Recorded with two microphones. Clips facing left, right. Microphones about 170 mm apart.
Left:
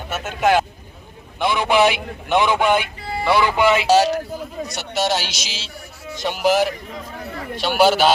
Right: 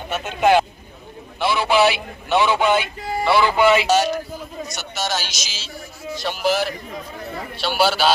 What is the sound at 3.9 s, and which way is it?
A man's voice, 35° left (ahead or behind).